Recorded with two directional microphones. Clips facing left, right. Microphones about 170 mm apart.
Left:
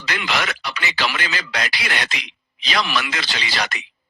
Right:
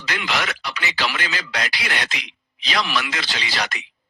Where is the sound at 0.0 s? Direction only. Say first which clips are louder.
Left 1 dB; 70° left (ahead or behind).